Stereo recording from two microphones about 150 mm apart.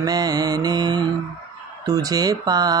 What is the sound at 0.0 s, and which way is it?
Speech, 25° right (ahead or behind).